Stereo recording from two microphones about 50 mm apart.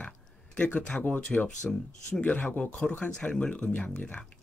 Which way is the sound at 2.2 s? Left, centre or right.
Left.